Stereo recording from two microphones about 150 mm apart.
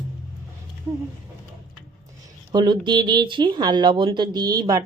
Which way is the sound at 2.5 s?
30° right (ahead or behind).